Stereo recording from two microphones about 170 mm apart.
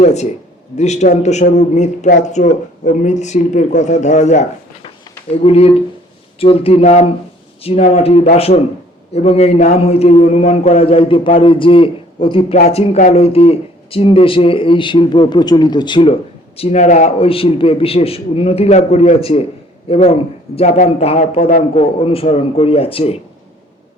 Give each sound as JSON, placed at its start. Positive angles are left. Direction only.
{"t": 0.0, "sound": "a man's voice", "side_deg": 40}
{"t": 16.6, "sound": "a man's voice", "side_deg": 40}
{"t": 21.8, "sound": "a man's voice", "side_deg": 35}